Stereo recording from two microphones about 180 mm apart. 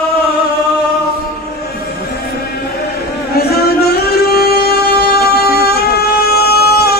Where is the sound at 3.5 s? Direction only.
60° left (ahead or behind).